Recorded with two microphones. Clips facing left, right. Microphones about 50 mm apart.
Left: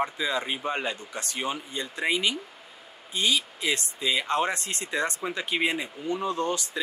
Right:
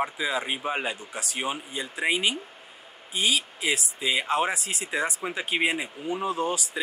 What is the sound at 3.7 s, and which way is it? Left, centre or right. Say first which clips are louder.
Speech: right 1 dB; centre.